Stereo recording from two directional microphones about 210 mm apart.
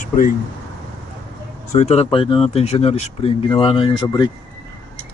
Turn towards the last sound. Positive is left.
turn(degrees=20)  # may be behind; listen again after turning